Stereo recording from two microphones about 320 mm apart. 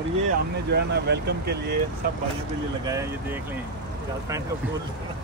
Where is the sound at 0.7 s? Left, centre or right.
Right.